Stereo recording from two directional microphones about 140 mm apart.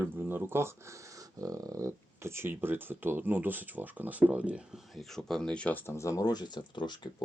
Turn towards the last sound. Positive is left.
turn(degrees=30)  # may be behind; listen again after turning